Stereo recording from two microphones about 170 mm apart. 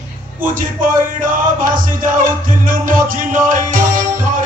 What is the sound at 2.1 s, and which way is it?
Music, 50° right (ahead or behind).